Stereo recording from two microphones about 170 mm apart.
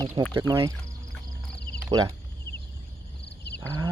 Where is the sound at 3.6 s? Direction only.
20° right (ahead or behind).